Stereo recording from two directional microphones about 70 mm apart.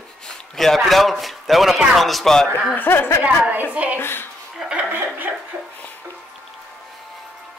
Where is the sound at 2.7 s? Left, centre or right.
Left.